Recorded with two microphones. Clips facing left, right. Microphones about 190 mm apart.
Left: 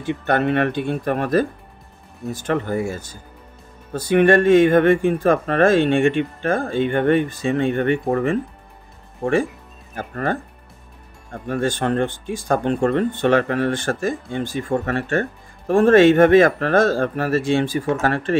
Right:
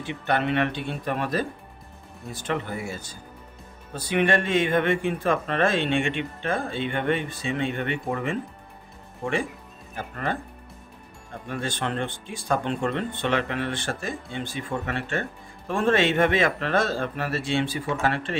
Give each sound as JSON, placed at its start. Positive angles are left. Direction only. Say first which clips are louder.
{"t": 0.0, "sound": "speech", "louder": "left 6 dB", "side_deg": 50}
{"t": 9.9, "sound": "speech", "louder": "left 6 dB", "side_deg": 45}
{"t": 11.4, "sound": "speech", "louder": "left 8 dB", "side_deg": 45}